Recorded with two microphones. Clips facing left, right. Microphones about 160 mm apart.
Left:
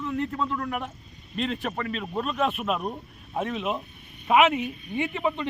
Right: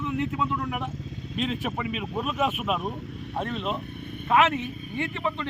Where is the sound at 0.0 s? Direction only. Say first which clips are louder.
Right 1 dB; 5° right (ahead or behind).